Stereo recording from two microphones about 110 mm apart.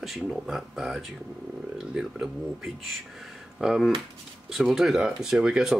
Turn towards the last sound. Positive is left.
turn(degrees=-10)  # may be behind; listen again after turning